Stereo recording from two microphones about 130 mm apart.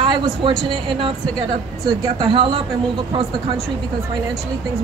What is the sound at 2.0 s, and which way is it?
Speech, 40° right (ahead or behind).